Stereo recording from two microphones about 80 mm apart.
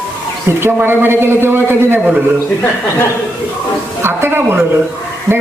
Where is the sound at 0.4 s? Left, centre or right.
Right.